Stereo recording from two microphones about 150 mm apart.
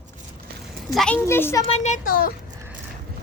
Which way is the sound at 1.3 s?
15° left (ahead or behind).